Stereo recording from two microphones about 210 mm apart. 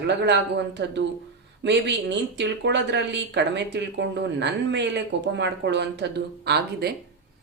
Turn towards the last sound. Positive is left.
turn(degrees=-50)  # may be behind; listen again after turning